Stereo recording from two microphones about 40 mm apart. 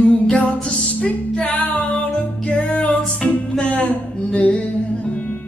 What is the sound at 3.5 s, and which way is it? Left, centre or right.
Music, centre.